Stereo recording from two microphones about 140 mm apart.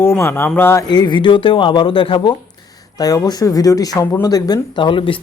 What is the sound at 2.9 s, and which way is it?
Speech, 25° left (ahead or behind).